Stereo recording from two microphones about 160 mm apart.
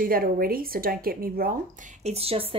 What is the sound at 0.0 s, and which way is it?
A woman's voice, 65° right (ahead or behind).